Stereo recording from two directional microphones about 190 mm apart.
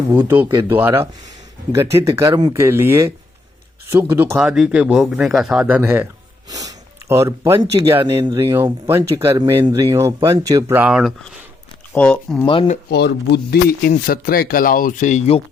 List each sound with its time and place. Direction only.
0.4 s speech: 20° right (ahead or behind)
4.1 s speech: 10° right (ahead or behind); by 12.5 s 5° left (ahead or behind)
12.5 s speech: 25° left (ahead or behind)
12.9 s speech: 65° left (ahead or behind); by 15.4 s 35° left (ahead or behind)